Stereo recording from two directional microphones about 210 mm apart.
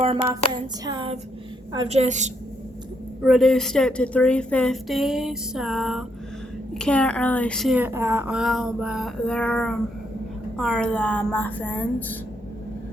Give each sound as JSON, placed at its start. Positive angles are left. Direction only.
{"t": 0.5, "sound": "hands", "side_deg": -20}
{"t": 3.2, "sound": "a woman's voice", "side_deg": 0}